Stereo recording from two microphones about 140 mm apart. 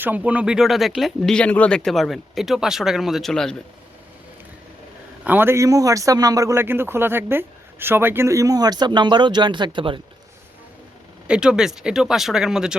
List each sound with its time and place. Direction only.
0.0 s speech: 10° right (ahead or behind); by 3.6 s 5° left (ahead or behind)
5.2 s a man's voice: 15° right (ahead or behind); by 10.0 s 35° right (ahead or behind)
11.3 s speech: 5° right (ahead or behind)